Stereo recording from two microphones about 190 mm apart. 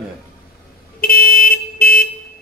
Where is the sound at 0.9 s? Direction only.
50° left (ahead or behind).